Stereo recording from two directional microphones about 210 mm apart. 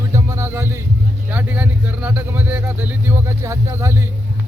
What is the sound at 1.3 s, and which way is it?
Speech, 10° right (ahead or behind).